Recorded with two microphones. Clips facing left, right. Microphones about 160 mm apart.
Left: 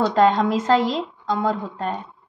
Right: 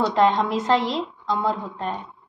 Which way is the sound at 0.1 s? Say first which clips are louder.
Left 2 dB; 40° left (ahead or behind).